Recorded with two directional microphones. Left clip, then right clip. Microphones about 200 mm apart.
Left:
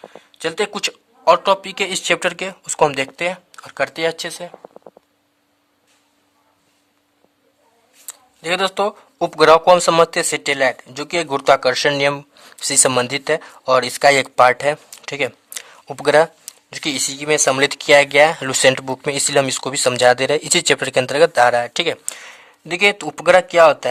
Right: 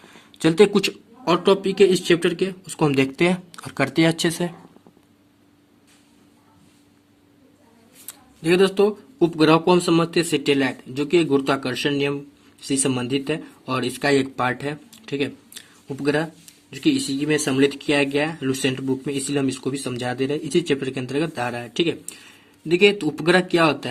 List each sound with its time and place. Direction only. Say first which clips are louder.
0.0 s a sound: right 2 dB; 5° left (ahead or behind)
0.8 s speech: right 1 dB; 25° left (ahead or behind)
2.9 s speech: right 1 dB; 15° left (ahead or behind)
8.0 s speech: right 1 dB; 30° left (ahead or behind); by 22.1 s 45° left (ahead or behind)
22.7 s speech: left 1 dB; 35° left (ahead or behind)